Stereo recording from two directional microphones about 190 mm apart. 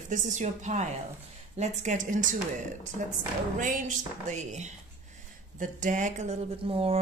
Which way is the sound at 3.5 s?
40° right (ahead or behind).